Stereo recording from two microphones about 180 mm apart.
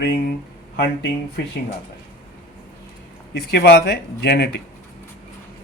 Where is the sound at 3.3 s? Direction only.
70° left (ahead or behind).